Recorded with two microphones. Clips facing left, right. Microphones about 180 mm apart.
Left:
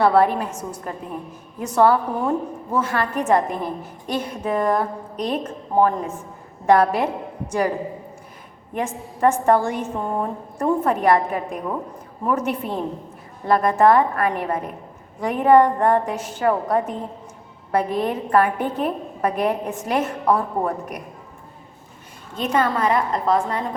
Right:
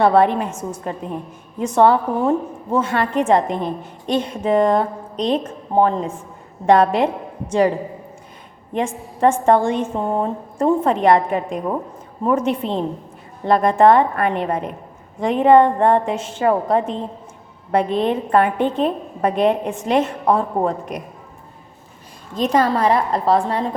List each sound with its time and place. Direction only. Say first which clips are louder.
0.0 s a woman's voice: right 2 dB; 25° right (ahead or behind)
8.7 s a woman's voice: right 4 dB; 25° right (ahead or behind)
22.4 s a woman's voice: right 4 dB; 35° right (ahead or behind)